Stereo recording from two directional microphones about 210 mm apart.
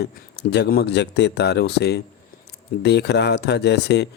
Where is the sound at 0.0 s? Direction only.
50° left (ahead or behind).